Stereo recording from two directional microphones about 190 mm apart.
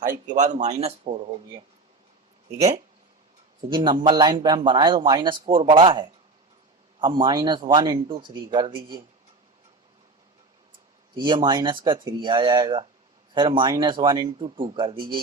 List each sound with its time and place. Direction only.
0.1 s speech: 40° right (ahead or behind)
3.7 s speech: 25° right (ahead or behind)
11.1 s speech: 25° right (ahead or behind)